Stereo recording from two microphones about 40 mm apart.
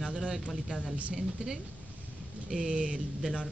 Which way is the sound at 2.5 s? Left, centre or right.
Centre.